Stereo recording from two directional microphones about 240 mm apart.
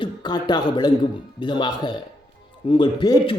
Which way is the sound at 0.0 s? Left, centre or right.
Centre.